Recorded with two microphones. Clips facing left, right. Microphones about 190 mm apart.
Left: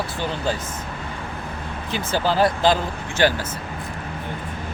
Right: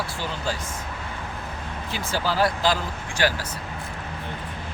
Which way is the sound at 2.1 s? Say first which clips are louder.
Left 4 dB; 20° left (ahead or behind).